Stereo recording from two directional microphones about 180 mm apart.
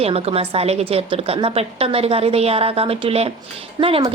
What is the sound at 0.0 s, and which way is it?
A woman's voice, 35° right (ahead or behind).